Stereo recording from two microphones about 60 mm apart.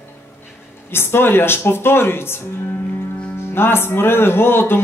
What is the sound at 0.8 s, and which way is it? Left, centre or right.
Speech, left.